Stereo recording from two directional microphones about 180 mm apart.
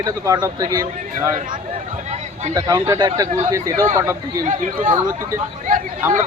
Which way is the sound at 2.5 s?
20° right (ahead or behind).